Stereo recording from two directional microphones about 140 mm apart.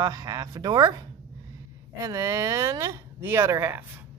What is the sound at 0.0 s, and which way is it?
Speech, 25° right (ahead or behind).